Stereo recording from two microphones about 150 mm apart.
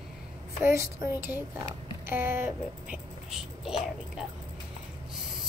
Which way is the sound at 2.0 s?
15° right (ahead or behind).